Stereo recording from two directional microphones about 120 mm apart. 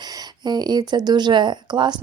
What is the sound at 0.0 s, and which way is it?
Speech, 35° right (ahead or behind).